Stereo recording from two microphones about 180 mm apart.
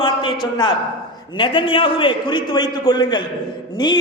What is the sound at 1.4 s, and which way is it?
Speech, 30° left (ahead or behind).